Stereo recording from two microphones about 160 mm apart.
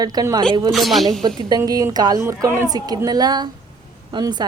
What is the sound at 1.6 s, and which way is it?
A woman's voice, 25° right (ahead or behind).